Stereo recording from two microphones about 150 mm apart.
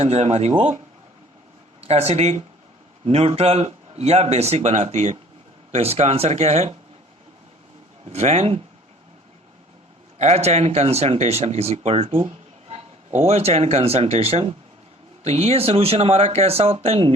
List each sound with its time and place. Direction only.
0.0 s speech: 45° right (ahead or behind)
1.8 s speech: 45° right (ahead or behind)
8.0 s speech: 45° right (ahead or behind)
10.2 s speech: 45° right (ahead or behind)